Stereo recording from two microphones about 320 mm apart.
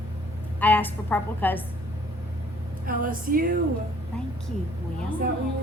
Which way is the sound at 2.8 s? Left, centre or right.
Right.